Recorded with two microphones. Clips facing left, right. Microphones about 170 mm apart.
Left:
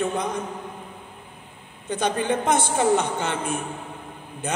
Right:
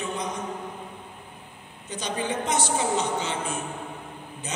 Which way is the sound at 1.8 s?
55° left (ahead or behind).